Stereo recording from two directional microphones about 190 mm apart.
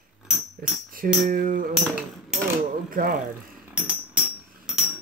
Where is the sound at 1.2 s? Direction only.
45° right (ahead or behind).